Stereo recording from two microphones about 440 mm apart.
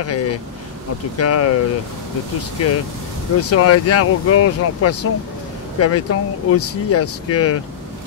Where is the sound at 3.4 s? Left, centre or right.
Left.